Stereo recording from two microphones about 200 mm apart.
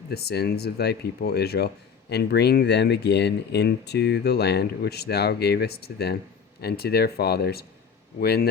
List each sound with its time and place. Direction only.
0.1 s speech: 50° left (ahead or behind)